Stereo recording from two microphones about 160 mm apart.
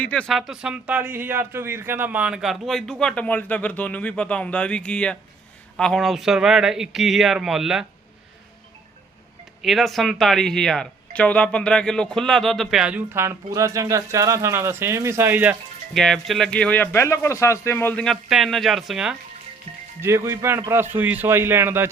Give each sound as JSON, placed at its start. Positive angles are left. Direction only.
{"t": 0.0, "sound": "a man's voice", "side_deg": 5}
{"t": 9.6, "sound": "a man's voice", "side_deg": 0}
{"t": 13.1, "sound": "speech", "side_deg": -15}
{"t": 16.0, "sound": "a man's voice", "side_deg": 0}
{"t": 20.0, "sound": "speech", "side_deg": -15}